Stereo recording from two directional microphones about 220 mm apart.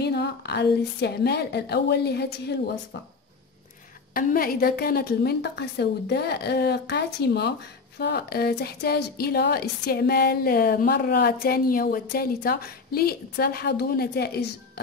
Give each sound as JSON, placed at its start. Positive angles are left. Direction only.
{"t": 0.0, "sound": "a woman's voice", "side_deg": 50}
{"t": 4.1, "sound": "a woman's voice", "side_deg": 40}